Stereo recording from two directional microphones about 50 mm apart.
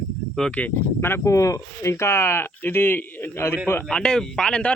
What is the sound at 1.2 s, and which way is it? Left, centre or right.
Speech, left.